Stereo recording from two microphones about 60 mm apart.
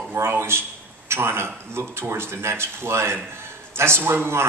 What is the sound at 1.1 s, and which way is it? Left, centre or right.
A man's voice, right.